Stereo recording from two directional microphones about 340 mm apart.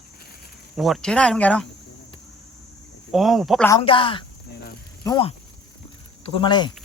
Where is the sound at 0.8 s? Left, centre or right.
Centre.